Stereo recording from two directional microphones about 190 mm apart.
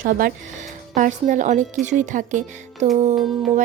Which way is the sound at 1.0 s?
40° right (ahead or behind).